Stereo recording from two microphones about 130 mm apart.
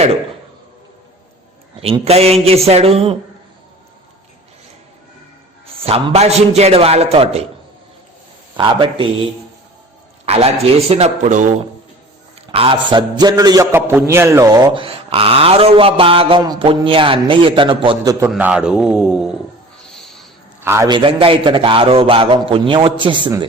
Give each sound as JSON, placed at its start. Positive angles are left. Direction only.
{"t": 1.8, "sound": "a man's voice", "side_deg": -50}
{"t": 5.8, "sound": "a man's voice", "side_deg": -50}
{"t": 8.5, "sound": "speech", "side_deg": -40}
{"t": 10.2, "sound": "a man's voice", "side_deg": -50}
{"t": 12.5, "sound": "a man's voice", "side_deg": -45}
{"t": 14.7, "sound": "a man's voice", "side_deg": -45}
{"t": 18.0, "sound": "a man's voice", "side_deg": -30}
{"t": 18.3, "sound": "a man's voice", "side_deg": -10}
{"t": 19.9, "sound": "a sound", "side_deg": 5}
{"t": 20.6, "sound": "a sound", "side_deg": -15}
{"t": 20.8, "sound": "a man's voice", "side_deg": -40}